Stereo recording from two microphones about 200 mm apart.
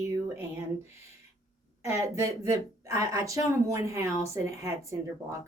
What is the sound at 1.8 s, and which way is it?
Speech, 15° right (ahead or behind).